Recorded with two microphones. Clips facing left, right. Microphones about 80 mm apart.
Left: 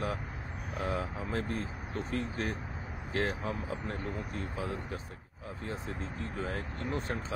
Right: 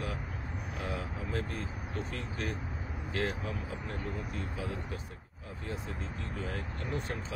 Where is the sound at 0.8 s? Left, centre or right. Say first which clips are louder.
Left 4 dB; left.